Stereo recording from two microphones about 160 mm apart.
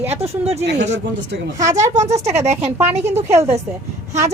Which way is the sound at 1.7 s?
45° right (ahead or behind).